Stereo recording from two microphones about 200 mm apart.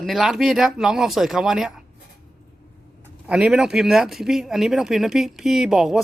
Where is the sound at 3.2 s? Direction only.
5° right (ahead or behind).